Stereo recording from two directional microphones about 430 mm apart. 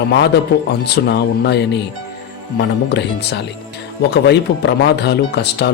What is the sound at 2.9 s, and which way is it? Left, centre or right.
Speech, left.